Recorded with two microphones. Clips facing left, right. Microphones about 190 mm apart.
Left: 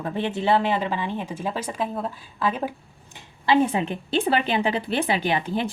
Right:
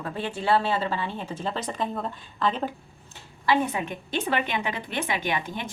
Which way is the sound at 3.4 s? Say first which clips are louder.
Left 4 dB; 30° left (ahead or behind).